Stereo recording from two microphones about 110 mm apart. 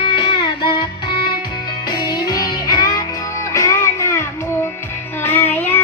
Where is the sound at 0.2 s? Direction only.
45° left (ahead or behind).